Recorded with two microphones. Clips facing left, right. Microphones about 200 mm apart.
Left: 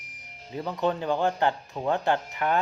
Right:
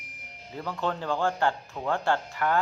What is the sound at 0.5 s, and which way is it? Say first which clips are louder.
Speech: left 4 dB; 20° left (ahead or behind).